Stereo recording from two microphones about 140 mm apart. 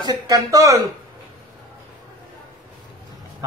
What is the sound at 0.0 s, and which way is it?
Speech, 30° right (ahead or behind).